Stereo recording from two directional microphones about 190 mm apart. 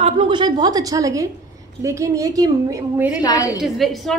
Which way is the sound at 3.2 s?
20° left (ahead or behind).